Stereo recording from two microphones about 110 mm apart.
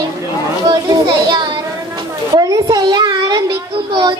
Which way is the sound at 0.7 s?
40° right (ahead or behind).